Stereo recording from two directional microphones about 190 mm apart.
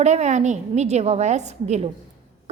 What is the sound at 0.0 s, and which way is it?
A woman's voice, 35° right (ahead or behind).